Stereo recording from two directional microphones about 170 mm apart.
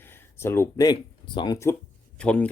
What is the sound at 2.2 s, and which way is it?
Speech, 5° left (ahead or behind).